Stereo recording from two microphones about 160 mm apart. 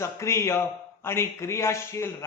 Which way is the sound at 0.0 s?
15° left (ahead or behind).